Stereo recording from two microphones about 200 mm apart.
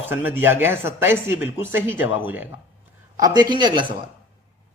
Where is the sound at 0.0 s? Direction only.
10° right (ahead or behind).